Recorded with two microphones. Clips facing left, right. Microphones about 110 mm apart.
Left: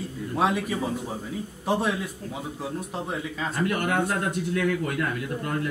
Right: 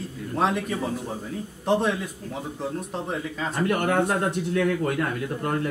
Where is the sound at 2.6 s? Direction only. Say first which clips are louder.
Right 3 dB; 5° left (ahead or behind).